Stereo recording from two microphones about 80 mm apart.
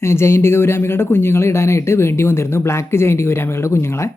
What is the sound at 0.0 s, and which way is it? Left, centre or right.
Speech, left.